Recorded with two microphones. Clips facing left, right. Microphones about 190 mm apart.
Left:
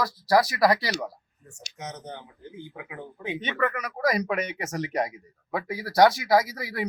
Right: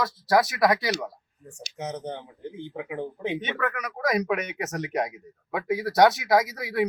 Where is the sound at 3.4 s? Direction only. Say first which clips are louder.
Left 2 dB; centre (ahead or behind).